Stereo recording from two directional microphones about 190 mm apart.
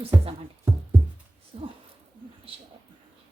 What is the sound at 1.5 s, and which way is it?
Speech, 30° right (ahead or behind).